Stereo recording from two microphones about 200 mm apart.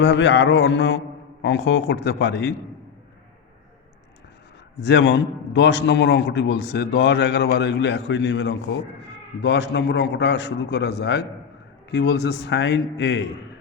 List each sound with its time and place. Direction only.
0.0 s a man's voice: 60° left (ahead or behind)
4.8 s a man's voice: 60° left (ahead or behind)